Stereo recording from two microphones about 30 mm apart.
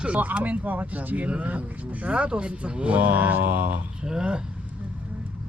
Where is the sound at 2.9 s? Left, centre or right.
Right.